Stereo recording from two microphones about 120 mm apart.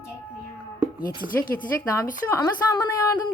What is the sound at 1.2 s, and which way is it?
Speech, 30° right (ahead or behind).